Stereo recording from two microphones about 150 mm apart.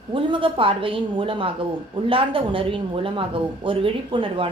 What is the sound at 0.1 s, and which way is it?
Speech, 35° right (ahead or behind).